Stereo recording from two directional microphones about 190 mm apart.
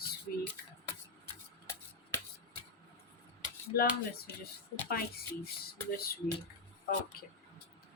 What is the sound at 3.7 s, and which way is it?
Speech, 55° left (ahead or behind).